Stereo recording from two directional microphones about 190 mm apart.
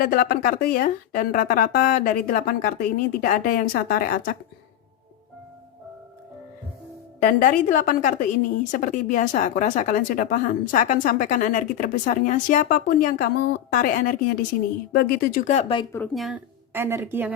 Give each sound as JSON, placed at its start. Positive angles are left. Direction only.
{"t": 0.0, "sound": "a woman's voice", "side_deg": 50}
{"t": 7.2, "sound": "a woman's voice", "side_deg": 45}
{"t": 15.4, "sound": "speech", "side_deg": 30}
{"t": 16.1, "sound": "speech", "side_deg": 0}
{"t": 16.7, "sound": "a woman's voice", "side_deg": -15}